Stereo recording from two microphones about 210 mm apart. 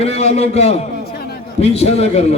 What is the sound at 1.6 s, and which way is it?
Speech, 30° left (ahead or behind).